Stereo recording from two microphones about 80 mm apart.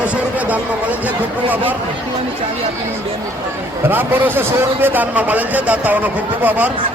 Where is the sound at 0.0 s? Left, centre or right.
Centre.